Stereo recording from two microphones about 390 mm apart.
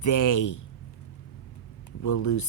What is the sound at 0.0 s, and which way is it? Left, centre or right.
Speech, left.